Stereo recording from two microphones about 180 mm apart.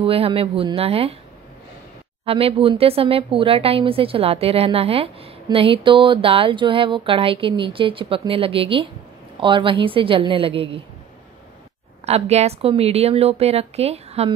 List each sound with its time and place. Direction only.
0.0 s speech: 30° right (ahead or behind)
2.2 s a woman's voice: 30° right (ahead or behind)
12.1 s speech: 35° right (ahead or behind)